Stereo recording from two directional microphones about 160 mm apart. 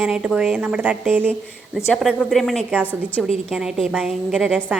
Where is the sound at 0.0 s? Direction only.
Centre (ahead or behind).